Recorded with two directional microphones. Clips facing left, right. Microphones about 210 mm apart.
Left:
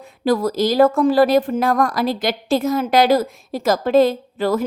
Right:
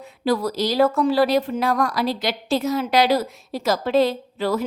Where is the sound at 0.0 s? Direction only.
50° left (ahead or behind).